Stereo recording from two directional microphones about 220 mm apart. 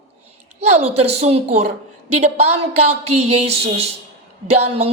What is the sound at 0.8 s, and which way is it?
A woman's voice, 30° right (ahead or behind).